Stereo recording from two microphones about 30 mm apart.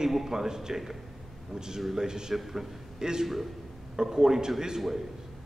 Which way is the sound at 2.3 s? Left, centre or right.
Centre.